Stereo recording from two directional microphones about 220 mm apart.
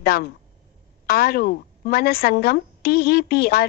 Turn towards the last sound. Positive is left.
turn(degrees=45)  # may be behind; listen again after turning